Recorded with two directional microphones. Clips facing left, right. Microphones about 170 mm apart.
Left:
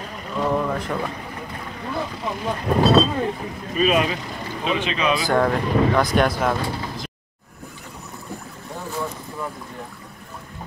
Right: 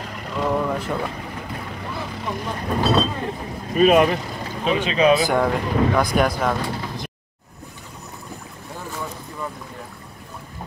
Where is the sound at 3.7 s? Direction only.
50° right (ahead or behind).